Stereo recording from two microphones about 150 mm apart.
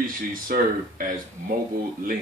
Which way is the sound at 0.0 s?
70° right (ahead or behind).